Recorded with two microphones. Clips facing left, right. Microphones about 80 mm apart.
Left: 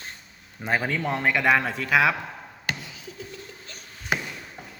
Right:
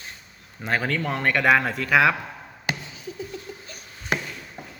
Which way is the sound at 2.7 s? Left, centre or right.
Centre.